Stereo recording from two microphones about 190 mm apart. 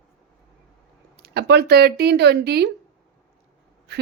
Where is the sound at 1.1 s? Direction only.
55° right (ahead or behind).